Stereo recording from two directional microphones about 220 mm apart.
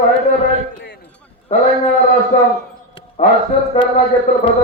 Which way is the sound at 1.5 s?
30° left (ahead or behind).